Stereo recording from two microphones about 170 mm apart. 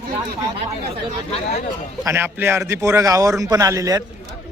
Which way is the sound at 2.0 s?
15° right (ahead or behind).